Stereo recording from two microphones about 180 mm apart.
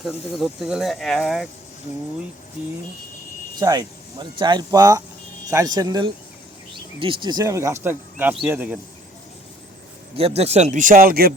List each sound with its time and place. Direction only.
0.3 s speech: centre (ahead or behind)
3.6 s speech: 20° right (ahead or behind)
10.2 s a man's voice: 35° right (ahead or behind); by 11.3 s 55° right (ahead or behind)